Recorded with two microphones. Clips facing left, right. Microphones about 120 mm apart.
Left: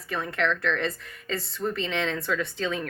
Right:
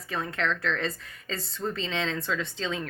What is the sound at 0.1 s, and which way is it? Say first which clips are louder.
A woman's voice: left 2 dB; 30° right (ahead or behind).